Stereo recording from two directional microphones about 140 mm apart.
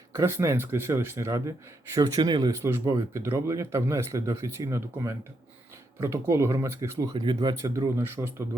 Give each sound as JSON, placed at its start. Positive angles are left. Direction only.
{"t": 0.2, "sound": "speech", "side_deg": -20}
{"t": 7.1, "sound": "speech", "side_deg": -30}
{"t": 7.9, "sound": "a man's voice", "side_deg": -15}